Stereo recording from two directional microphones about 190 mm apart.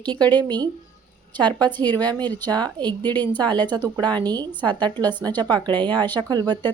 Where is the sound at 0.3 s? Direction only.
20° right (ahead or behind).